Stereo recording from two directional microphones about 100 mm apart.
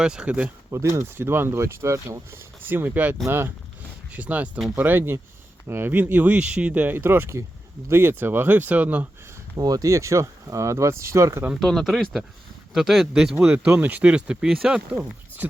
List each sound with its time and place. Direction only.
0.0 s speech: 10° right (ahead or behind)
0.7 s speech: 30° right (ahead or behind)
2.6 s speech: 20° right (ahead or behind)
9.6 s speech: 40° right (ahead or behind)
11.6 s speech: centre (ahead or behind)
15.4 s speech: 15° right (ahead or behind)